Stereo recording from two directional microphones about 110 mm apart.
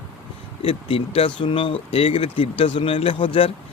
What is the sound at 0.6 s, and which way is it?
Speech, 60° left (ahead or behind).